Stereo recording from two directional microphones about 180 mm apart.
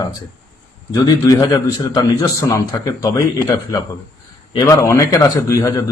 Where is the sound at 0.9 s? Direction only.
20° left (ahead or behind).